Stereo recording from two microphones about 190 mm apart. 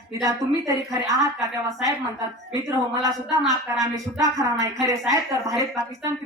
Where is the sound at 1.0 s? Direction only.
15° right (ahead or behind).